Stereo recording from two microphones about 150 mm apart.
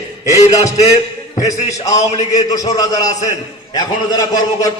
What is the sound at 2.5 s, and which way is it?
A man's voice, 25° left (ahead or behind).